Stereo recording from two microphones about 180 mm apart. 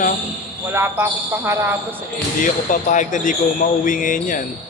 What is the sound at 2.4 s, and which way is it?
Speech, 45° left (ahead or behind).